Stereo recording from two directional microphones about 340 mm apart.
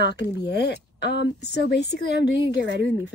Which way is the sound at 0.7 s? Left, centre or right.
Left.